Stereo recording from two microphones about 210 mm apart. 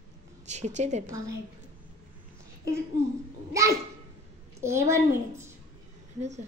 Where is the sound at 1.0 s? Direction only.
15° right (ahead or behind).